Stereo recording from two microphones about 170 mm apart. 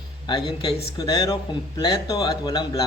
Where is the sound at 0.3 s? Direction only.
25° left (ahead or behind).